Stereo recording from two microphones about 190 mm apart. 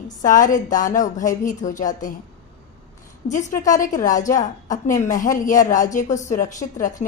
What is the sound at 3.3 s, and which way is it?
A woman's voice, 40° left (ahead or behind).